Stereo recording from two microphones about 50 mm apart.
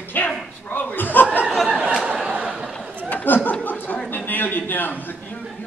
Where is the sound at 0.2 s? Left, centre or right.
Left.